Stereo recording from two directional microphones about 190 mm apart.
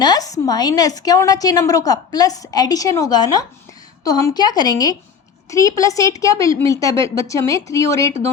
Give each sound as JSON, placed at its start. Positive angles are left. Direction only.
{"t": 0.0, "sound": "a woman's voice", "side_deg": 20}